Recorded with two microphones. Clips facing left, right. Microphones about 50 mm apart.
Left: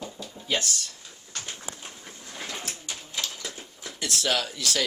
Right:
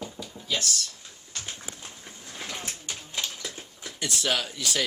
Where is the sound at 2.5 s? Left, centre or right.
Right.